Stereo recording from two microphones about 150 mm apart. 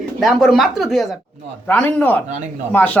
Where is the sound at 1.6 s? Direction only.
10° left (ahead or behind).